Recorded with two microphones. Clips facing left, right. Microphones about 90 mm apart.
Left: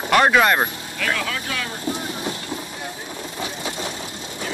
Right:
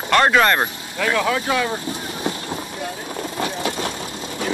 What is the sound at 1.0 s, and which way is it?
Speech, 25° right (ahead or behind).